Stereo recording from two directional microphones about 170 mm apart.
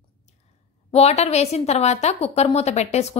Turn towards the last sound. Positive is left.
turn(degrees=40)  # may be behind; listen again after turning